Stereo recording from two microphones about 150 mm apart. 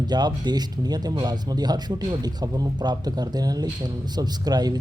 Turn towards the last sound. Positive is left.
turn(degrees=-25)  # may be behind; listen again after turning